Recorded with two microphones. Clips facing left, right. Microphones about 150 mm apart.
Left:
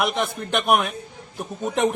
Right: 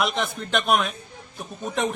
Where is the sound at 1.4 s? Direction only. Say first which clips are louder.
Left 5 dB; 15° left (ahead or behind).